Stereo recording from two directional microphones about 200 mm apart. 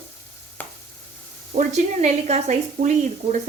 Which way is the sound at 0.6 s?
10° left (ahead or behind).